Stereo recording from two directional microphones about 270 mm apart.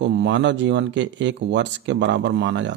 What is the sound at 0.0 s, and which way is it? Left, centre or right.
Speech, right.